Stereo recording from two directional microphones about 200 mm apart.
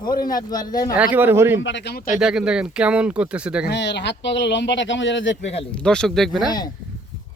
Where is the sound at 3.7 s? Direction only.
60° left (ahead or behind).